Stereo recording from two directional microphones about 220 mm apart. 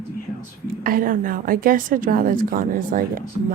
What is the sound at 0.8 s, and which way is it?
A woman's voice, 40° right (ahead or behind).